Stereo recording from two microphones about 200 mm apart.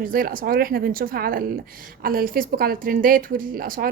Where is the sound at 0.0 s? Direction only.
45° right (ahead or behind).